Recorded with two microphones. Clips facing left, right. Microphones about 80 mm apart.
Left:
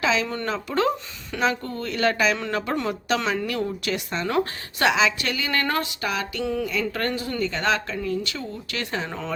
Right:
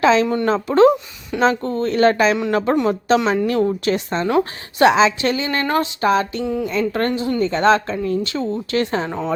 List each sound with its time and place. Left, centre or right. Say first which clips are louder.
0.0 s a woman's voice: right 9 dB; right
4.3 s a woman's voice: right 5 dB; centre
4.9 s a woman's voice: right 6 dB; right
6.4 s a sound: right 4 dB; centre
6.7 s speech: right 6 dB; right